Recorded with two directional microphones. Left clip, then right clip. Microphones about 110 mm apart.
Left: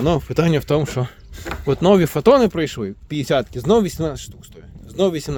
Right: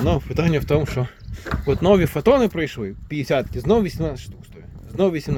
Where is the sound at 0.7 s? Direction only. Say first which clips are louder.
Left 1 dB; 35° left (ahead or behind).